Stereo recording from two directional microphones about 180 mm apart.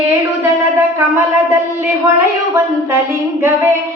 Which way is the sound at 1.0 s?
15° right (ahead or behind).